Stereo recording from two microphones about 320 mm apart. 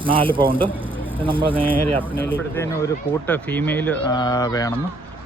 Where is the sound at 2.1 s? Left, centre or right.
Centre.